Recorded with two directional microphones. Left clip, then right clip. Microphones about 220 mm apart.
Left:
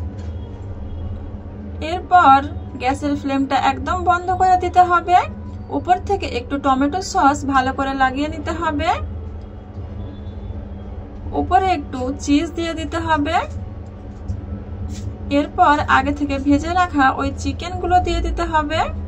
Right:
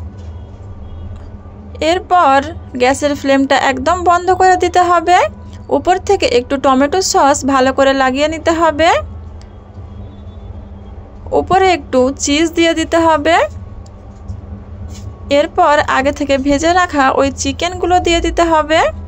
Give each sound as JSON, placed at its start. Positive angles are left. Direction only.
{"t": 1.8, "sound": "a woman's voice", "side_deg": -45}
{"t": 11.3, "sound": "a woman's voice", "side_deg": -40}
{"t": 15.2, "sound": "a woman's voice", "side_deg": -40}